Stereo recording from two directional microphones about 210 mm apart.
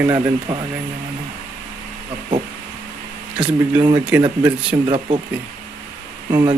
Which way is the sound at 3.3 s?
5° right (ahead or behind).